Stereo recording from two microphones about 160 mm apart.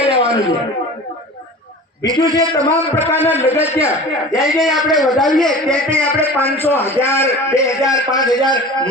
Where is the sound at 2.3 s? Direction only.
20° right (ahead or behind).